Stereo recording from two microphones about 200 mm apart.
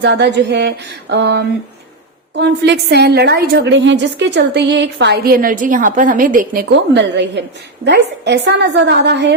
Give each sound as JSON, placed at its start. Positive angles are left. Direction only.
{"t": 0.0, "sound": "a woman's voice", "side_deg": -60}
{"t": 6.7, "sound": "a woman's voice", "side_deg": -60}